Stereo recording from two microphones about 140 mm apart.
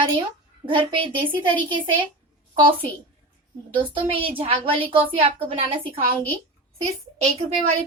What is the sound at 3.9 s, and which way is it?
A woman's voice, 40° right (ahead or behind).